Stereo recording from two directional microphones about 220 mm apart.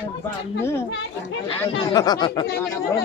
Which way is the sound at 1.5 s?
15° left (ahead or behind).